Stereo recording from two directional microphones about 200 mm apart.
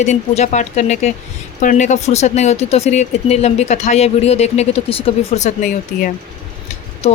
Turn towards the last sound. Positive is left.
turn(degrees=30)  # may be behind; listen again after turning